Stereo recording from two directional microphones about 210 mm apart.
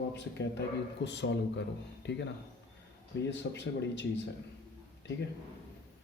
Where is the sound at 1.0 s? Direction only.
55° left (ahead or behind).